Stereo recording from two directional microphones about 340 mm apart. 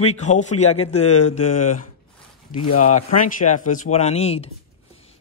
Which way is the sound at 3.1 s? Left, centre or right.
Left.